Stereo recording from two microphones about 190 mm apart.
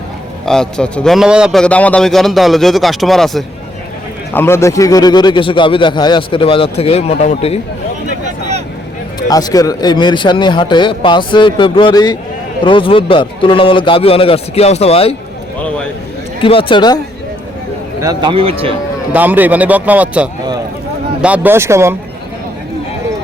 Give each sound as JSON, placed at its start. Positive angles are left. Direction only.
{"t": 0.4, "sound": "a man's voice", "side_deg": 5}
{"t": 4.4, "sound": "a man's voice", "side_deg": 15}
{"t": 9.3, "sound": "a man's voice", "side_deg": 20}
{"t": 16.4, "sound": "a man's voice", "side_deg": 30}
{"t": 18.0, "sound": "a man's voice", "side_deg": -20}
{"t": 19.1, "sound": "a man's voice", "side_deg": -10}